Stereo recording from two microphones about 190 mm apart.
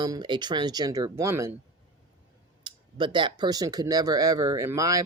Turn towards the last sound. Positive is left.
turn(degrees=-15)  # may be behind; listen again after turning